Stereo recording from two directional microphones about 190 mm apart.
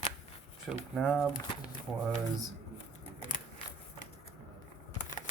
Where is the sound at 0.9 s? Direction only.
Centre (ahead or behind).